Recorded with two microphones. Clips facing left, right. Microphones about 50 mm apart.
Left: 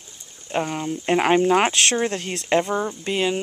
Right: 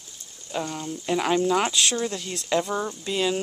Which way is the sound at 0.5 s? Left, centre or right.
Left.